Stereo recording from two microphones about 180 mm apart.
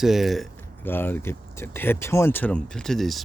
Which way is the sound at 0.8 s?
10° left (ahead or behind).